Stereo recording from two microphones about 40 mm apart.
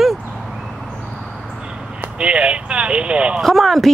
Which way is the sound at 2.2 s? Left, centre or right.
Right.